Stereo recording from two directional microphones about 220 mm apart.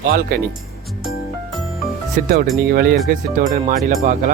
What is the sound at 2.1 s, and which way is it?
Speech, 40° right (ahead or behind).